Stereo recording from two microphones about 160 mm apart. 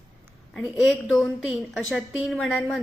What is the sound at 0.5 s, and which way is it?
Speech, centre (ahead or behind).